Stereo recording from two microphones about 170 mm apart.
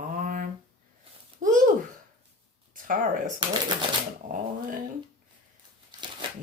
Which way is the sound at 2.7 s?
50° right (ahead or behind).